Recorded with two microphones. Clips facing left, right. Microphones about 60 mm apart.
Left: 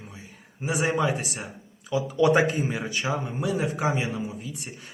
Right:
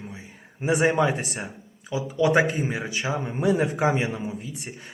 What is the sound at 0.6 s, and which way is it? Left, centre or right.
Speech, right.